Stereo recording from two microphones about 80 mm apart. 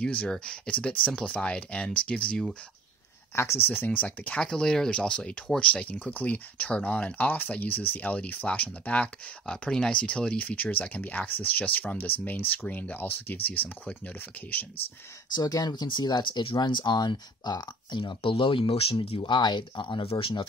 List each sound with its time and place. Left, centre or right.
0.0 s speech: centre
3.3 s speech: left
15.3 s speech: left